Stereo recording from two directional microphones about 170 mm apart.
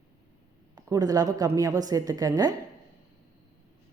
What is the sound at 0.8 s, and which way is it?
A woman's voice, 20° right (ahead or behind).